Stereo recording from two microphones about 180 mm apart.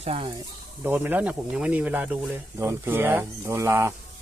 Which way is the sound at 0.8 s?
10° right (ahead or behind).